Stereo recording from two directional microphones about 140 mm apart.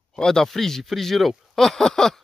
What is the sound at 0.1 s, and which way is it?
Speech, 5° left (ahead or behind).